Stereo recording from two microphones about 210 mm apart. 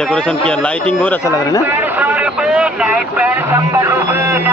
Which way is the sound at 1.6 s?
10° right (ahead or behind).